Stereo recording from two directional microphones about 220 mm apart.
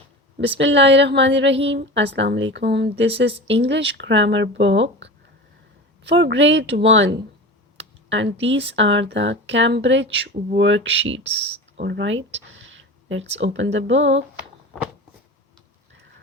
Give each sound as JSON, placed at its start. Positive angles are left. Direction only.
{"t": 0.3, "sound": "speech", "side_deg": -55}
{"t": 11.3, "sound": "speech", "side_deg": -30}
{"t": 11.8, "sound": "speech", "side_deg": -55}
{"t": 12.5, "sound": "a sound", "side_deg": -60}
{"t": 13.4, "sound": "speech", "side_deg": -55}